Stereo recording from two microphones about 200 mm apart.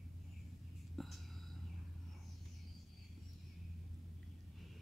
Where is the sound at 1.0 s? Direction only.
Centre (ahead or behind).